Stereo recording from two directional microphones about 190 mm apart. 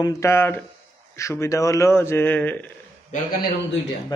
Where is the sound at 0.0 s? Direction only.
15° left (ahead or behind).